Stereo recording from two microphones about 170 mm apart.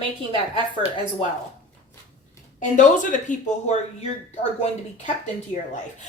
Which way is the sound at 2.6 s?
50° left (ahead or behind).